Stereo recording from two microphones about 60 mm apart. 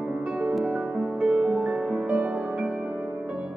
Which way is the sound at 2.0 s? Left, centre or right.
Right.